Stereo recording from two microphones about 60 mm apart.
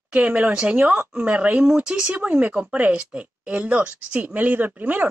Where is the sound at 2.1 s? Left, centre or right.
Right.